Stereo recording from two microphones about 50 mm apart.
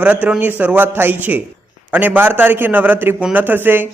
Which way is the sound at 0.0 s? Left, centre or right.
Right.